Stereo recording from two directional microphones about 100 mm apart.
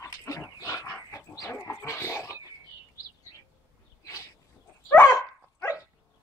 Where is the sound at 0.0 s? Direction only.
30° left (ahead or behind).